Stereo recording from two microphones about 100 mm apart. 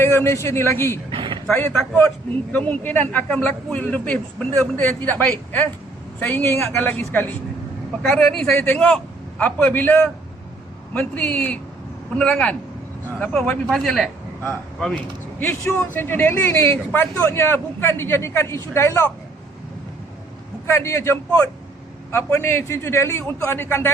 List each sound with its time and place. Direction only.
0.0 s a man's voice: 25° left (ahead or behind)
1.1 s a sound: 55° right (ahead or behind)
1.5 s a man's voice: 20° left (ahead or behind)
8.0 s speech: 5° left (ahead or behind)
8.5 s speech: 20° left (ahead or behind)
15.4 s a man's voice: 20° left (ahead or behind)
20.7 s a man's voice: 30° left (ahead or behind)